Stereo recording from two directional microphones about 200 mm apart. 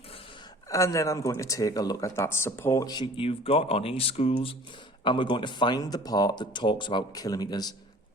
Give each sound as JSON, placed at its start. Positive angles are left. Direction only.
{"t": 0.7, "sound": "speech", "side_deg": 15}